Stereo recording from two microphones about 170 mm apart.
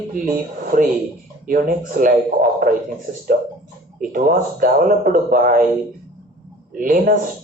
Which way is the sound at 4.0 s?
55° right (ahead or behind).